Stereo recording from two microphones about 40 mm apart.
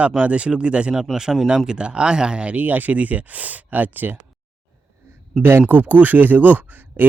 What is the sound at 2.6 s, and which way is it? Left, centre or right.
Speech, right.